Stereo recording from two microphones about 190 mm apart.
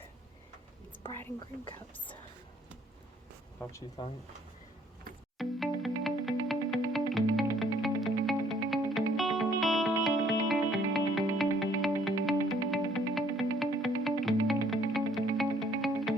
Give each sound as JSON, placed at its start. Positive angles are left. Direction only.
{"t": 3.6, "sound": "speech", "side_deg": 15}
{"t": 5.4, "sound": "music", "side_deg": 0}